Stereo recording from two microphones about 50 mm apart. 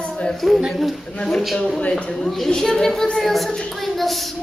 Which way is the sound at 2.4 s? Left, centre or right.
Centre.